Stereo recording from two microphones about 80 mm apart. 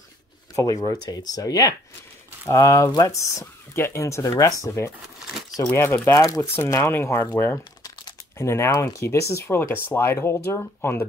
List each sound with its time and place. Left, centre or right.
0.7 s speech: left
9.6 s speech: left